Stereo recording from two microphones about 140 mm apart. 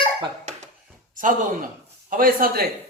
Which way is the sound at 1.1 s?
70° right (ahead or behind).